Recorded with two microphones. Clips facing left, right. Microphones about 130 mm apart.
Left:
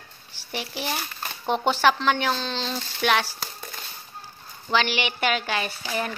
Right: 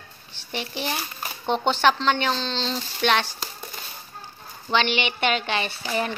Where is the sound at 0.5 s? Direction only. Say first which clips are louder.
Right 1 dB; 5° left (ahead or behind).